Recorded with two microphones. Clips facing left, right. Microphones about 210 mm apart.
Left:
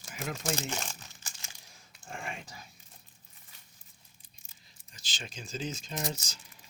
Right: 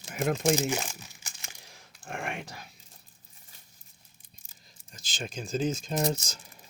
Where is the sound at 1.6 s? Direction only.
75° right (ahead or behind).